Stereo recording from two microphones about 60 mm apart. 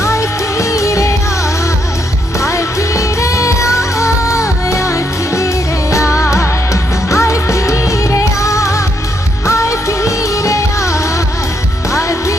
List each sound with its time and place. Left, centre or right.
0.0 s music: left
2.4 s music: left